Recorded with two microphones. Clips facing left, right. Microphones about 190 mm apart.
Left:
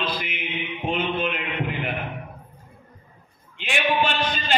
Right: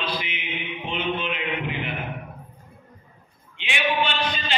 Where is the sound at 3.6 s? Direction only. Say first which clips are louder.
Left 2 dB; 45° left (ahead or behind).